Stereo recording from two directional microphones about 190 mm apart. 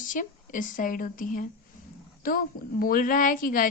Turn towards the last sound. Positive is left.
turn(degrees=45)  # may be behind; listen again after turning